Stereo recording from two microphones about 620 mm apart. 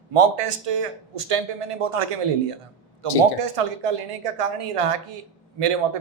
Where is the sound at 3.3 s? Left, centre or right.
Right.